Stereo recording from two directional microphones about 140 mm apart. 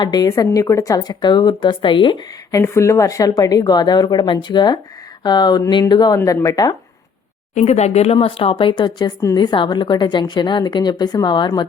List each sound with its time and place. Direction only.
0.0 s a woman's voice: 30° left (ahead or behind)
7.5 s a woman's voice: 50° left (ahead or behind); by 11.6 s 35° left (ahead or behind)